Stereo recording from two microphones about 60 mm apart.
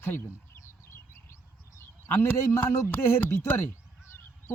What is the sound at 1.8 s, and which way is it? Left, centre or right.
A man's voice, left.